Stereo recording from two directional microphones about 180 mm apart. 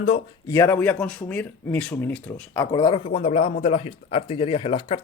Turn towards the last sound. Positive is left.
turn(degrees=30)  # may be behind; listen again after turning